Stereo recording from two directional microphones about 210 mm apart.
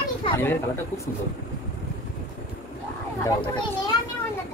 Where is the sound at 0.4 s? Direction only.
10° left (ahead or behind).